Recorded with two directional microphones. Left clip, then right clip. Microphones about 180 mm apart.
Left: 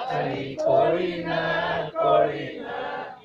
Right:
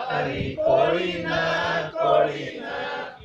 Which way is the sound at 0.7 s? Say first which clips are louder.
Even; 15° right (ahead or behind).